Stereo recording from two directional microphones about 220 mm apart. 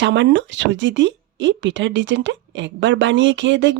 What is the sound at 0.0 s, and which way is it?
Speech, 55° right (ahead or behind).